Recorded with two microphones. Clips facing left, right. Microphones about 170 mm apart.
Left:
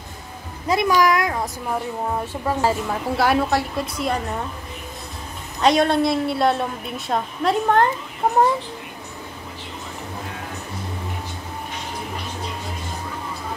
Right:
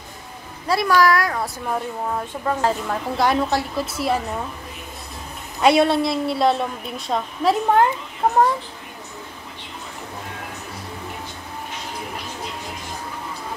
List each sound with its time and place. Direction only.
0.7 s speech: 15° left (ahead or behind)
2.4 s a woman's voice: 10° left (ahead or behind)
5.6 s a woman's voice: 5° right (ahead or behind)